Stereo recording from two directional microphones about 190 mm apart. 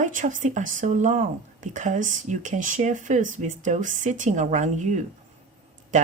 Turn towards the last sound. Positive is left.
turn(degrees=-40)  # may be behind; listen again after turning